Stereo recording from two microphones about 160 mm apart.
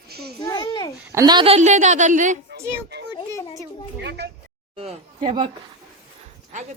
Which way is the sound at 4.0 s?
90° right.